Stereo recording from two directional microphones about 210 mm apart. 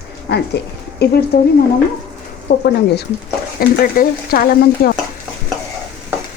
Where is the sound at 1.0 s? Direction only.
50° left (ahead or behind).